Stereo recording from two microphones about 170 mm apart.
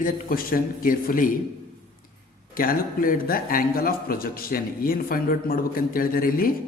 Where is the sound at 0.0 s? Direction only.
55° left (ahead or behind).